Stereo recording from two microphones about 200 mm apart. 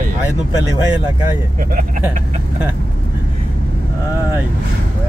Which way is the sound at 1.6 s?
45° right (ahead or behind).